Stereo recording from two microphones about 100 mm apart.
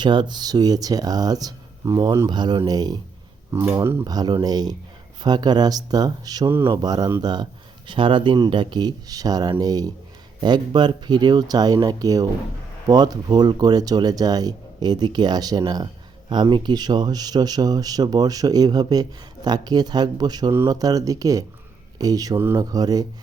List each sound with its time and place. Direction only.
0.0 s speech: 50° right (ahead or behind)
3.5 s speech: 25° right (ahead or behind)
4.0 s speech: 40° right (ahead or behind)
7.9 s speech: 55° right (ahead or behind); by 23.0 s 40° right (ahead or behind)